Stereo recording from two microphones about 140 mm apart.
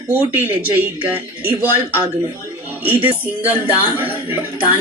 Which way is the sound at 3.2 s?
10° right (ahead or behind).